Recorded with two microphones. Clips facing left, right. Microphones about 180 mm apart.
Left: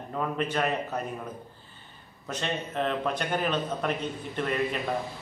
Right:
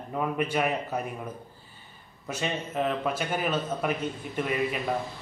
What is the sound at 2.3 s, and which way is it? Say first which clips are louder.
A man's voice: right 1 dB; 10° right (ahead or behind).